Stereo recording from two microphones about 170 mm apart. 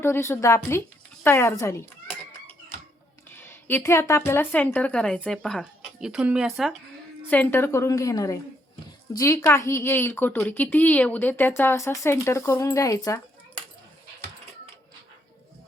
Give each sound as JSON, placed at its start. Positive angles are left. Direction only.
{"t": 0.0, "sound": "a woman's voice", "side_deg": 15}
{"t": 3.3, "sound": "a woman's voice", "side_deg": 15}
{"t": 7.3, "sound": "a woman's voice", "side_deg": 10}